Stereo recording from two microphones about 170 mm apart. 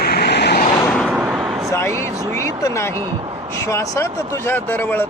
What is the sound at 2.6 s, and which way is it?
Speech, 15° left (ahead or behind).